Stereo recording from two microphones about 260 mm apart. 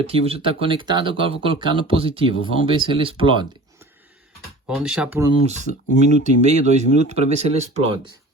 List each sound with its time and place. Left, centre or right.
0.0 s speech: right
4.7 s speech: centre
6.0 s speech: right